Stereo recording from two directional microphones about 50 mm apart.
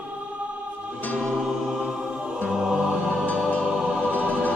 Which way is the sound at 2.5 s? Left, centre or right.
Centre.